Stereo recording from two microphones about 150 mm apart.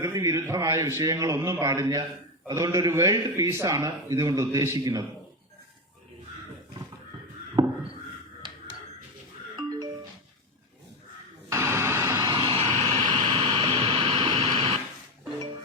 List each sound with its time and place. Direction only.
0.0 s a man's voice: 20° right (ahead or behind)
7.6 s crow: 30° right (ahead or behind)
9.6 s music: 25° right (ahead or behind)
11.4 s a sound: 20° right (ahead or behind)
12.3 s vehicle: 35° right (ahead or behind)
13.1 s a sound: 30° right (ahead or behind)